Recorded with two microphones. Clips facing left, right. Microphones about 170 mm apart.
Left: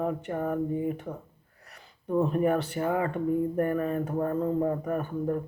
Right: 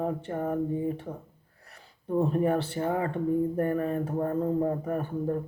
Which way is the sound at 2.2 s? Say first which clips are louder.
Even; 30° right (ahead or behind).